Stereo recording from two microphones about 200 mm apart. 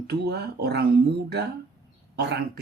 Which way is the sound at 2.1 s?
55° right (ahead or behind).